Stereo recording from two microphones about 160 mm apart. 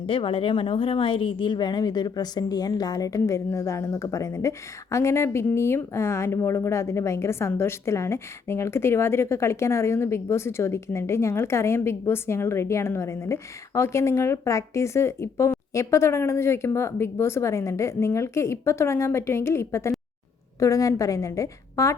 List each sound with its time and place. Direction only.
0.0 s a woman's voice: 35° left (ahead or behind); by 21.9 s 20° left (ahead or behind)